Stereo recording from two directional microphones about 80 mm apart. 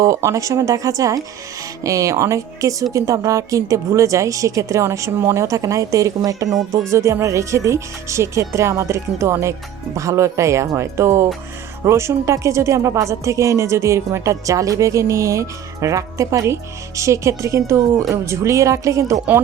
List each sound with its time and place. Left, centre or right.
0.0 s a woman's voice: right